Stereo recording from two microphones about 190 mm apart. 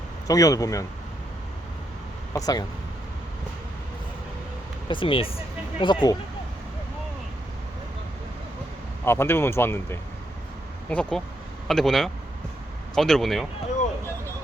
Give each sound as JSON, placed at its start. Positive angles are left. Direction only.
{"t": 0.3, "sound": "speech", "side_deg": 20}
{"t": 2.3, "sound": "speech", "side_deg": 20}
{"t": 4.9, "sound": "speech", "side_deg": 25}
{"t": 9.0, "sound": "speech", "side_deg": 10}